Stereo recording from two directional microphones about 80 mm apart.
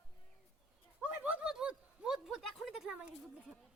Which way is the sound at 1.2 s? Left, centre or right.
Centre.